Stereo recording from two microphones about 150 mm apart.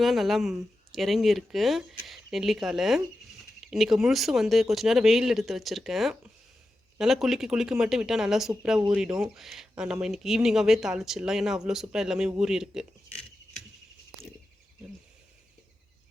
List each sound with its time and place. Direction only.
0.0 s speech: centre (ahead or behind)